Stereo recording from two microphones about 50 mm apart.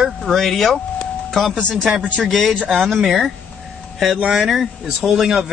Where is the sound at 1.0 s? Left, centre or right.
Centre.